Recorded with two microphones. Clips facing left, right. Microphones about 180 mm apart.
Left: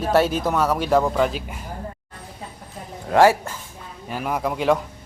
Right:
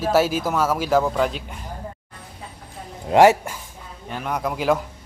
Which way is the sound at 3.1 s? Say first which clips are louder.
Right 2 dB; 20° right (ahead or behind).